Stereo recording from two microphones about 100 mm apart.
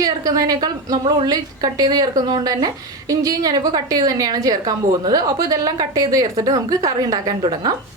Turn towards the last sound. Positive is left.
turn(degrees=-45)  # may be behind; listen again after turning